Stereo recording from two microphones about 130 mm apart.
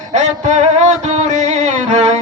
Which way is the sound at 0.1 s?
60° right (ahead or behind).